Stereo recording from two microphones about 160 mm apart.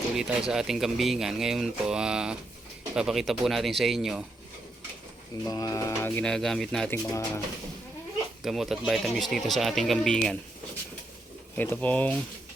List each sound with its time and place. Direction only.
0.2 s speech: 5° right (ahead or behind)
5.5 s speech: 20° left (ahead or behind); by 7.0 s 5° left (ahead or behind)
7.1 s speech: 20° left (ahead or behind)
8.4 s speech: centre (ahead or behind)
11.5 s speech: 10° left (ahead or behind)